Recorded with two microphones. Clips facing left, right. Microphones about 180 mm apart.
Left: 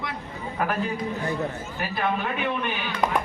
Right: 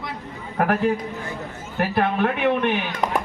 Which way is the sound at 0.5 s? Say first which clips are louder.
Right 6 dB; 60° right (ahead or behind).